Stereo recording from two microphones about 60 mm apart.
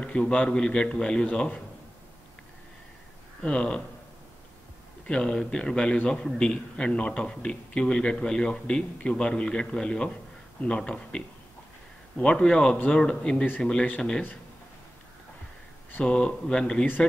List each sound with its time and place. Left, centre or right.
0.0 s a man's voice: centre
3.4 s a man's voice: centre
5.0 s a man's voice: centre
16.0 s a man's voice: centre